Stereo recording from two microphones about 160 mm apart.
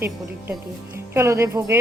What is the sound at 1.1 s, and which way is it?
Speech, 15° right (ahead or behind).